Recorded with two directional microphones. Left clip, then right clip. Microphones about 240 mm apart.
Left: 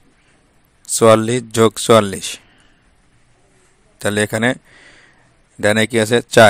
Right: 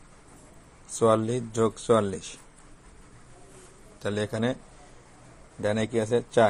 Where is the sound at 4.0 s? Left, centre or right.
Left.